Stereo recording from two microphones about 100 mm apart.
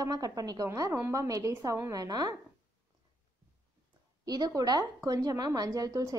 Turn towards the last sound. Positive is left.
turn(degrees=-35)  # may be behind; listen again after turning